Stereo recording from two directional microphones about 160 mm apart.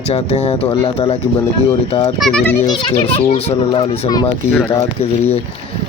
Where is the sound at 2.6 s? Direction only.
30° left (ahead or behind).